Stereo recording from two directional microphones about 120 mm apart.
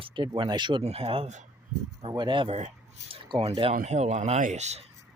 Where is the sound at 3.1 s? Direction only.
45° right (ahead or behind).